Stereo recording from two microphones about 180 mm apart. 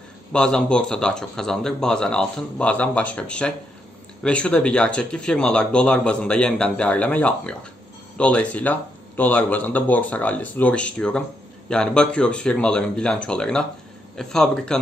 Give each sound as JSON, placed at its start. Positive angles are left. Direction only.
{"t": 0.3, "sound": "speech", "side_deg": 5}